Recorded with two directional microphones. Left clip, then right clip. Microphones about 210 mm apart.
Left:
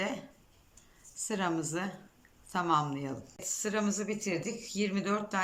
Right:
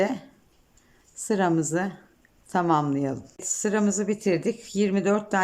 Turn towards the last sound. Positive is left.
turn(degrees=-35)  # may be behind; listen again after turning